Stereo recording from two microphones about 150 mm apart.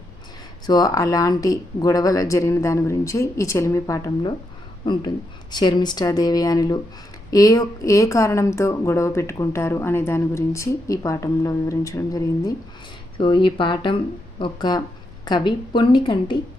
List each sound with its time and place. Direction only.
0.7 s speech: 25° left (ahead or behind)